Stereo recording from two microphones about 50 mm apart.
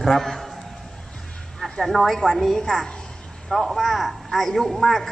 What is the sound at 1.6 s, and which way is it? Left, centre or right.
A woman's voice, centre.